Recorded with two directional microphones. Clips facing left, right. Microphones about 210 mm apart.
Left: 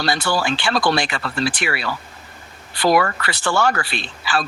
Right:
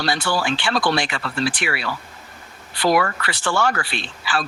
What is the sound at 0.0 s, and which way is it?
Speech, 40° left (ahead or behind).